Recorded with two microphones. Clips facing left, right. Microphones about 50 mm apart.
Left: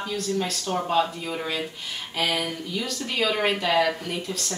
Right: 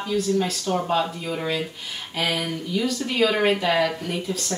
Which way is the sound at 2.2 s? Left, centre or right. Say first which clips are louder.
Right 1 dB; centre.